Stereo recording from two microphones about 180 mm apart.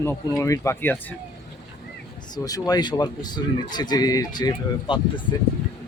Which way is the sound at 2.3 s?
20° left (ahead or behind).